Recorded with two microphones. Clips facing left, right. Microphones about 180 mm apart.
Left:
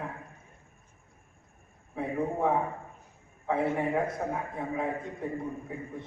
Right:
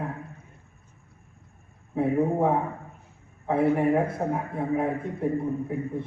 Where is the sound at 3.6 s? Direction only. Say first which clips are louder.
Right 7 dB; 60° right (ahead or behind).